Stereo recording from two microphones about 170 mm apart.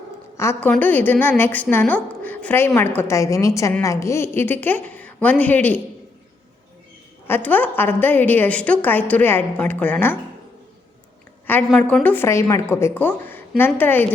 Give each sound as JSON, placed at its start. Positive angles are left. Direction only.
{"t": 0.3, "sound": "a woman's voice", "side_deg": 15}
{"t": 7.3, "sound": "a woman's voice", "side_deg": 10}
{"t": 11.7, "sound": "a woman's voice", "side_deg": 5}